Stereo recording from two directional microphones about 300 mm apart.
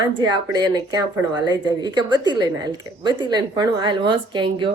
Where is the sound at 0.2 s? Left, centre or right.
Centre.